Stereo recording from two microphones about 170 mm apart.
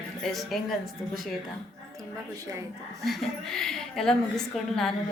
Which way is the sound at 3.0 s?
Centre (ahead or behind).